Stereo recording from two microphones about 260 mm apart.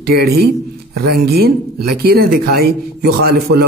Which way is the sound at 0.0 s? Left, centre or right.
Right.